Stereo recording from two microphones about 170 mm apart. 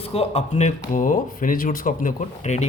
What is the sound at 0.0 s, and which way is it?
A man's voice, 35° left (ahead or behind).